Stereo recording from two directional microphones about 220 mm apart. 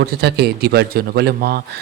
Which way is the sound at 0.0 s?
45° right (ahead or behind).